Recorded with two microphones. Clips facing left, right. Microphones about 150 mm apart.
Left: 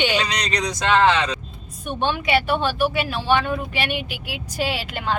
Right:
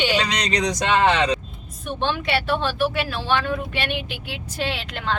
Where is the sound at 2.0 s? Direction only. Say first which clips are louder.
Left 2 dB; 10° left (ahead or behind).